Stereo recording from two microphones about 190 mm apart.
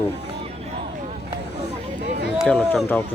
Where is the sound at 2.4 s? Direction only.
5° left (ahead or behind).